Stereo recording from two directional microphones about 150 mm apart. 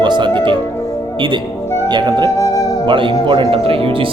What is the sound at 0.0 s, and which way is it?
Speech, 30° right (ahead or behind).